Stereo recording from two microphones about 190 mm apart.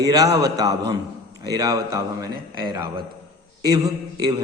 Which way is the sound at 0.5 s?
20° right (ahead or behind).